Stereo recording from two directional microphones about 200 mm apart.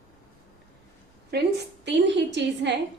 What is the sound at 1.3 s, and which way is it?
A woman's voice, 55° right (ahead or behind).